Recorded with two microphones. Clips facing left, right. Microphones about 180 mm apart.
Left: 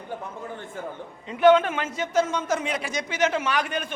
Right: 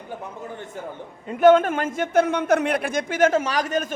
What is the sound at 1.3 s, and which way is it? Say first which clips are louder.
A man's voice: right 3 dB; 45° right (ahead or behind).